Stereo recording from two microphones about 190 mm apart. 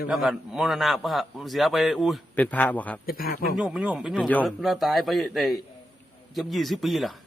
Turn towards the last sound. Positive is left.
turn(degrees=0)  # may be behind; listen again after turning